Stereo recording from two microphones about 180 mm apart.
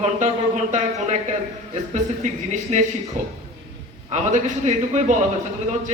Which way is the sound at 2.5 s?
45° right (ahead or behind).